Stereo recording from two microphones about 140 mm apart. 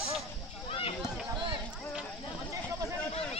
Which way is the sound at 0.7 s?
45° left (ahead or behind).